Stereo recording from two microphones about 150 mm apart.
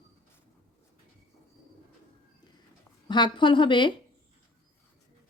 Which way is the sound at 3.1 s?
30° left (ahead or behind).